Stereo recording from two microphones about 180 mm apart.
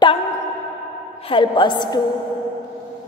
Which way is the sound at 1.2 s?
30° left (ahead or behind).